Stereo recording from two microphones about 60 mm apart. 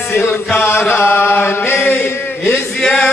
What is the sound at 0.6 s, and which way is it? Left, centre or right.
Chant, left.